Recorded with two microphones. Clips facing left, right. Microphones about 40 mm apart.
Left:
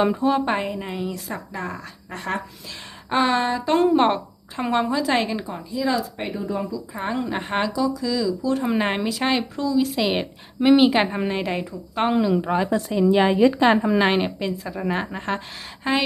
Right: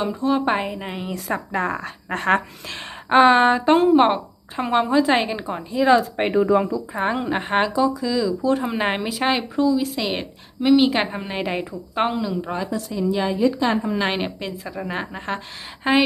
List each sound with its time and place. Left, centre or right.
0.2 s a woman's voice: centre
1.1 s speech: right
3.1 s speech: right
3.8 s a woman's voice: centre
5.7 s speech: right
6.3 s speech: right
6.9 s a woman's voice: right
9.7 s a woman's voice: centre
12.4 s speech: left
12.9 s a woman's voice: left
13.4 s a woman's voice: left
14.0 s a woman's voice: centre
15.9 s a woman's voice: centre